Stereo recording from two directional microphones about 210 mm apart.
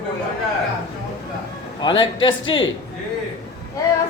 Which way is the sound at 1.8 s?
20° left (ahead or behind).